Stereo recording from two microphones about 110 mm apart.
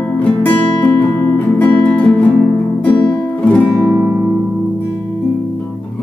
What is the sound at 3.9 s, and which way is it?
Music, 25° right (ahead or behind).